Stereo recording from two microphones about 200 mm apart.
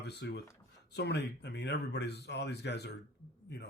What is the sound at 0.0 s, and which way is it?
Speech, 55° left (ahead or behind).